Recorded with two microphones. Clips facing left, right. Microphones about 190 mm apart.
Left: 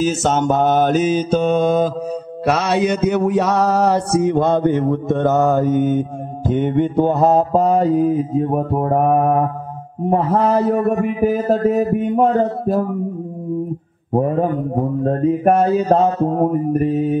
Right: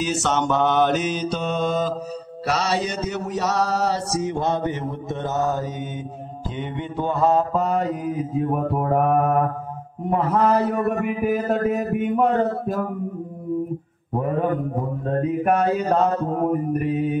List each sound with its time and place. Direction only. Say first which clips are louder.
0.0 s mantra: left 5 dB; 45° left (ahead or behind); by 9.1 s 30° left (ahead or behind)
10.0 s a man's voice: left 4 dB; 25° left (ahead or behind)
15.0 s a man's voice: left 5 dB; 35° left (ahead or behind)